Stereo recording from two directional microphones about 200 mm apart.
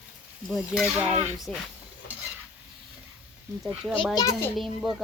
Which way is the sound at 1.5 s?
5° left (ahead or behind).